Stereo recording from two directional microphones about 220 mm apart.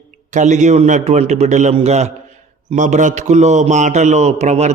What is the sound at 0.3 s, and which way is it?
A man's voice, 35° right (ahead or behind).